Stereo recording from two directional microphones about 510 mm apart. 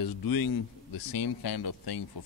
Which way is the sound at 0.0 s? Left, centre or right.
Left.